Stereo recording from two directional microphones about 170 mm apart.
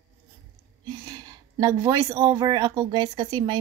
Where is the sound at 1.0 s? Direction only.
20° right (ahead or behind).